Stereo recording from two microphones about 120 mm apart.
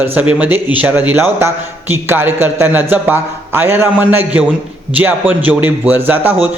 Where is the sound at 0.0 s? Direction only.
15° right (ahead or behind).